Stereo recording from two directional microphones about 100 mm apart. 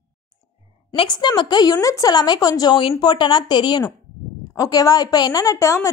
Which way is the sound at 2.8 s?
55° left (ahead or behind).